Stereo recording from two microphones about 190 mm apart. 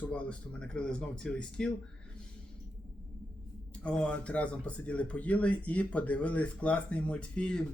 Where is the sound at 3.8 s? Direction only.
5° left (ahead or behind).